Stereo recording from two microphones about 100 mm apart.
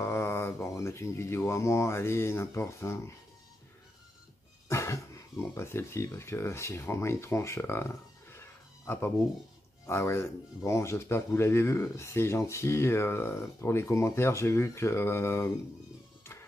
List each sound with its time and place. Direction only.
0.0 s speech: 25° left (ahead or behind)
4.6 s speech: 30° left (ahead or behind)